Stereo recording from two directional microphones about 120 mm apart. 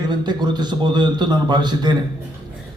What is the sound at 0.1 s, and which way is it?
A man's voice, 40° right (ahead or behind).